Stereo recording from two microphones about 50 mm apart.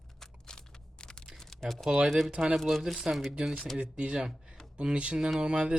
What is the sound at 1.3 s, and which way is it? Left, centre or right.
Typing, centre.